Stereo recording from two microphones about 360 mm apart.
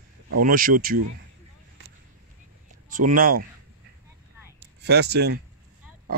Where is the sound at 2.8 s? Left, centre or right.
Right.